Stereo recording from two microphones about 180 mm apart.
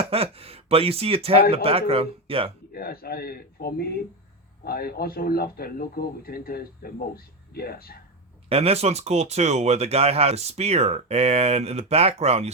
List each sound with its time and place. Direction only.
0.0 s speech: 35° right (ahead or behind)
2.7 s speech: 55° left (ahead or behind)
8.4 s speech: 35° right (ahead or behind)